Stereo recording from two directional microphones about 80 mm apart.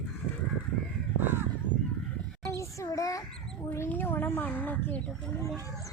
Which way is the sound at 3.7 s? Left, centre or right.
Left.